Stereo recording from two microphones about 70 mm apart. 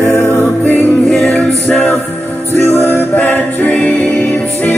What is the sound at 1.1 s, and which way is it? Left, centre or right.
A capella, centre.